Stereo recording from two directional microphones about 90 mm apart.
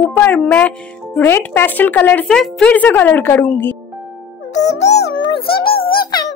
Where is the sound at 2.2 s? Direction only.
5° left (ahead or behind).